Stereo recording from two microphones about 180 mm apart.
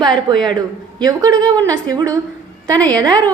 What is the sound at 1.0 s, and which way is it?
A woman's voice, 20° right (ahead or behind).